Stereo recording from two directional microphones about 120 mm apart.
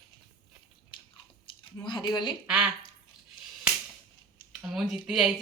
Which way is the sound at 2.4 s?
10° right (ahead or behind).